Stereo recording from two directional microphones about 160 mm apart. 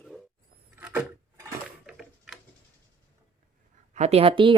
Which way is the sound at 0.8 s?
10° right (ahead or behind).